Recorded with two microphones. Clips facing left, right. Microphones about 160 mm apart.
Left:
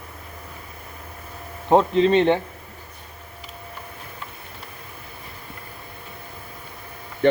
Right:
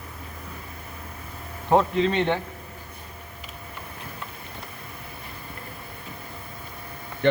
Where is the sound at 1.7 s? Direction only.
20° left (ahead or behind).